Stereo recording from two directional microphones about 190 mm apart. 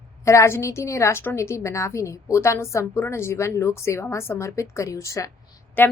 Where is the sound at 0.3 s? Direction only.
15° left (ahead or behind).